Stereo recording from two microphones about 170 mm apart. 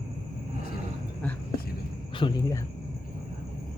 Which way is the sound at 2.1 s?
30° left (ahead or behind).